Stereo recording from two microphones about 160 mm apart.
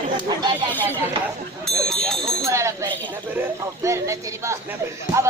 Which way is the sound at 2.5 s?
20° right (ahead or behind).